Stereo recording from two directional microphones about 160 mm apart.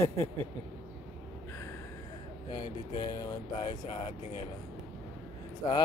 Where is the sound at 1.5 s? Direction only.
15° left (ahead or behind).